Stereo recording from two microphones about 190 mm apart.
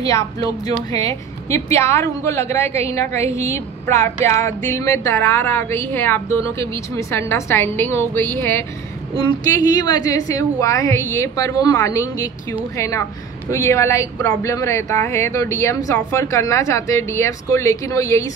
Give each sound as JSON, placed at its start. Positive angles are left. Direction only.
{"t": 0.0, "sound": "a woman's voice", "side_deg": 15}
{"t": 9.1, "sound": "a woman's voice", "side_deg": 20}